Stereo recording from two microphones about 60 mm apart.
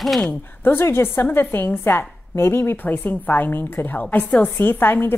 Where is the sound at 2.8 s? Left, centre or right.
Left.